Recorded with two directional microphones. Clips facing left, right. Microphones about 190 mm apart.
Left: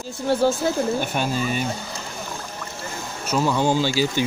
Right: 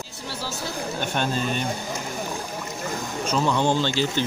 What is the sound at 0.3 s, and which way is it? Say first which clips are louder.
Speech: left 15 dB; 50° left (ahead or behind).